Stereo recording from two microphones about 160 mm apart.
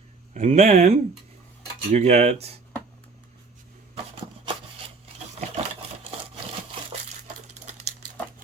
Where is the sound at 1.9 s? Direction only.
45° right (ahead or behind).